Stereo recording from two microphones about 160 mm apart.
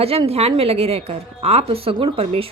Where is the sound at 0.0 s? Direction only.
40° right (ahead or behind).